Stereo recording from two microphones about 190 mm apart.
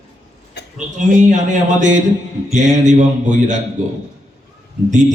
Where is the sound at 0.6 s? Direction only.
60° left (ahead or behind).